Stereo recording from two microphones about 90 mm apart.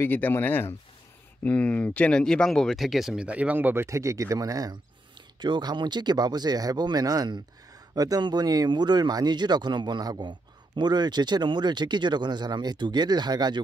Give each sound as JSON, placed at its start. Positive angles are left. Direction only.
{"t": 0.0, "sound": "speech", "side_deg": 25}
{"t": 5.4, "sound": "speech", "side_deg": -55}